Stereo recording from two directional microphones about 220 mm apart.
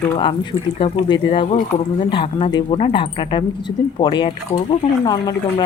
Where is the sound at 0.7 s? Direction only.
25° left (ahead or behind).